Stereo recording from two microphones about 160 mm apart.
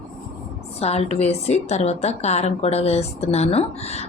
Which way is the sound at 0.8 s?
40° left (ahead or behind).